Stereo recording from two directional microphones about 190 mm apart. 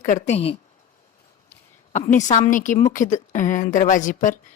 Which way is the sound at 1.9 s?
40° left (ahead or behind).